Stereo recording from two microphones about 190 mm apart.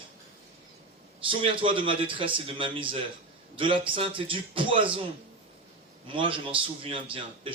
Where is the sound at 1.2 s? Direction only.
25° right (ahead or behind).